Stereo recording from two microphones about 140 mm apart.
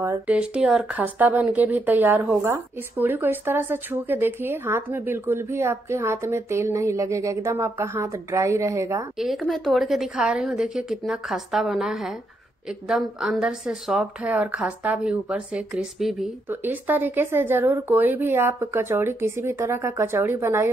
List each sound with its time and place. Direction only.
0.3 s speech: 10° right (ahead or behind)
9.2 s a woman's voice: centre (ahead or behind)
16.4 s speech: 15° right (ahead or behind)